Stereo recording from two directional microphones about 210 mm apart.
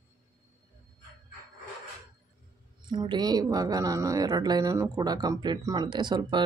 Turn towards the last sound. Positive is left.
turn(degrees=-20)  # may be behind; listen again after turning